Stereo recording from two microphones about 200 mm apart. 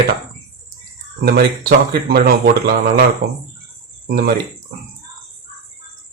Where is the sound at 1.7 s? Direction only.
50° right (ahead or behind).